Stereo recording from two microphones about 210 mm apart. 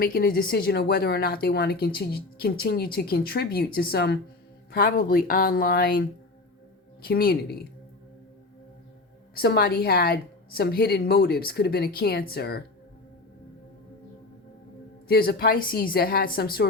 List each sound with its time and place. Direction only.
0.0 s speech: 45° left (ahead or behind)
9.3 s speech: 45° left (ahead or behind)
15.0 s speech: 45° left (ahead or behind)